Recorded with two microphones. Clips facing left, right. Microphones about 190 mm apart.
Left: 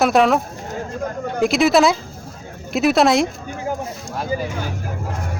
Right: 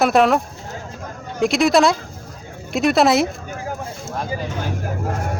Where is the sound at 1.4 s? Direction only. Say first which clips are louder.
Even; centre (ahead or behind).